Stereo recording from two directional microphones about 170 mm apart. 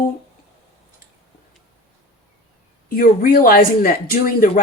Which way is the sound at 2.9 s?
55° left (ahead or behind).